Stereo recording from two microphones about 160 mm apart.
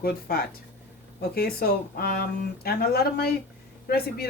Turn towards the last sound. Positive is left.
turn(degrees=75)  # may be behind; listen again after turning